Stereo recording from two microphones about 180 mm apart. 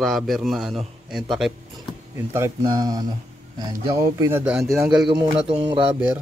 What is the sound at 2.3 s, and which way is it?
A man's voice, 20° right (ahead or behind).